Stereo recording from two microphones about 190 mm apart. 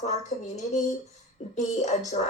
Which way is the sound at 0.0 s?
35° left (ahead or behind).